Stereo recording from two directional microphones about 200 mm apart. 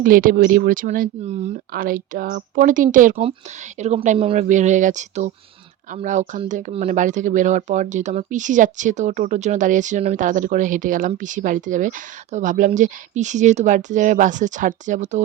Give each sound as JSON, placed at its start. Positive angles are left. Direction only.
{"t": 0.0, "sound": "speech", "side_deg": -45}
{"t": 1.7, "sound": "speech", "side_deg": -45}